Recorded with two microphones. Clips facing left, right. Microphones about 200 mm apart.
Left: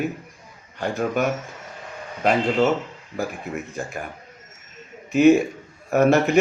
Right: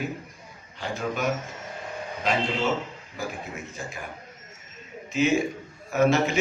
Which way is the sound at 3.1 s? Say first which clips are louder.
Left 7 dB; 55° left (ahead or behind).